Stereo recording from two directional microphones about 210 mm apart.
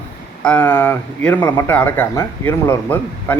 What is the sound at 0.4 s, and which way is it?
Speech, 5° left (ahead or behind).